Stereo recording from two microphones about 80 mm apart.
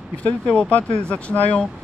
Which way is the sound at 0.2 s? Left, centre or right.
Centre.